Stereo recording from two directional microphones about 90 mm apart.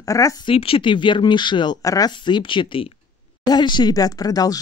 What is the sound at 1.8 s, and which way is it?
Speech, 40° left (ahead or behind).